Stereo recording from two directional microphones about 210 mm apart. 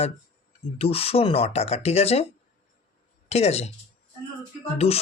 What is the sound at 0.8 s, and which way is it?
Speech, 30° left (ahead or behind).